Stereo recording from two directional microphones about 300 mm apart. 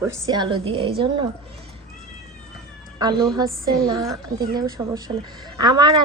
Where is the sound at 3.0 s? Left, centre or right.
Centre.